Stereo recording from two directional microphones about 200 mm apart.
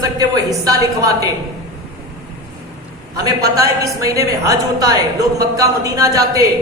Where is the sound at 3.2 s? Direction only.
20° right (ahead or behind).